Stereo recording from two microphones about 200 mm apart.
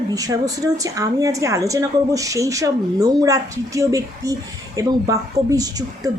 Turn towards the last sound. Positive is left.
turn(degrees=-20)  # may be behind; listen again after turning